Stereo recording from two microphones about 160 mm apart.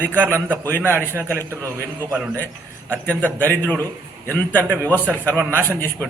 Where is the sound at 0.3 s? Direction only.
15° right (ahead or behind).